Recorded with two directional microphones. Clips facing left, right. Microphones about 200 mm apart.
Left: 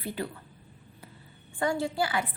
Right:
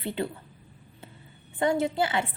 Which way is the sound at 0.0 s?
25° right (ahead or behind).